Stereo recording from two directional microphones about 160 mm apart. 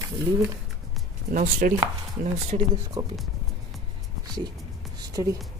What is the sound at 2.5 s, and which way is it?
Speech, 40° right (ahead or behind).